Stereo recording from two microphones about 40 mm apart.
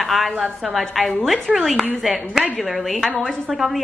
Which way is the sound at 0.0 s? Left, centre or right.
Centre.